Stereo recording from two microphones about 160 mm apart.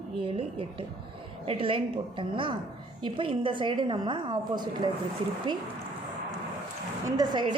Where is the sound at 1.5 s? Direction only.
35° right (ahead or behind).